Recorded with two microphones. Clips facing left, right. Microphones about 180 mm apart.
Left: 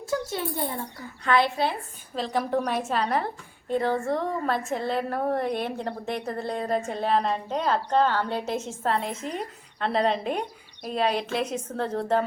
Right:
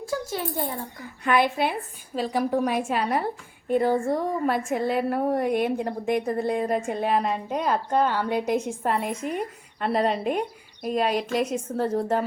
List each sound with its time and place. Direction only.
1.2 s a woman's voice: 15° right (ahead or behind)